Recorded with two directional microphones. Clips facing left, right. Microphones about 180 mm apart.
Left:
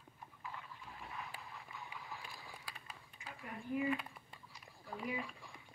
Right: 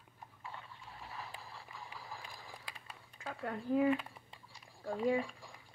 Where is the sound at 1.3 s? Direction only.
30° right (ahead or behind).